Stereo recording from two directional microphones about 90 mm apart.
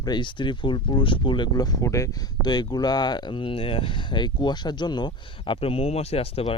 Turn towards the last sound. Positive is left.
turn(degrees=90)